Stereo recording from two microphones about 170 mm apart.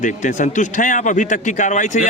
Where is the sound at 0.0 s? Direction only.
45° left (ahead or behind).